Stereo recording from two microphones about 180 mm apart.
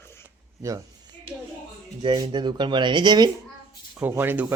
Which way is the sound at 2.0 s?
25° right (ahead or behind).